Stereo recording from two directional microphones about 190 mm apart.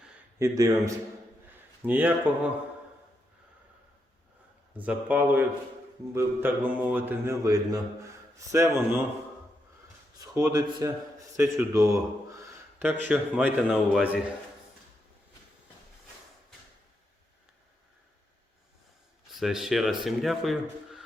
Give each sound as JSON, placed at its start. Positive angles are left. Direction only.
{"t": 0.0, "sound": "a sound", "side_deg": -15}
{"t": 1.8, "sound": "a man's voice", "side_deg": -10}
{"t": 4.8, "sound": "a man's voice", "side_deg": -10}
{"t": 10.2, "sound": "a man's voice", "side_deg": -15}
{"t": 19.3, "sound": "speech", "side_deg": 0}